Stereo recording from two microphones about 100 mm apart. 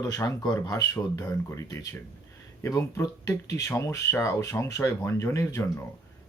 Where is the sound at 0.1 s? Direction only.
40° left (ahead or behind).